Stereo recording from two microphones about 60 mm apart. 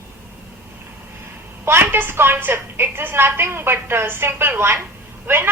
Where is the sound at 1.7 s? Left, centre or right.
Right.